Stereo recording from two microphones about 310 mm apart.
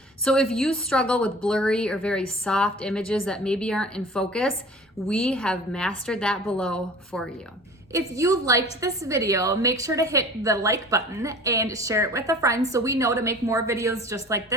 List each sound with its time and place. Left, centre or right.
0.3 s a woman's voice: centre
7.9 s a woman's voice: centre